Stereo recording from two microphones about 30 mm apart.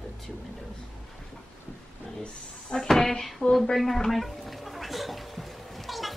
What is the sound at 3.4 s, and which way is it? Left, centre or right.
Speech, left.